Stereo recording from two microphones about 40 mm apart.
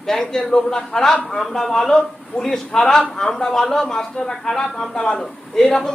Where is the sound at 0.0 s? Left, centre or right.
Centre.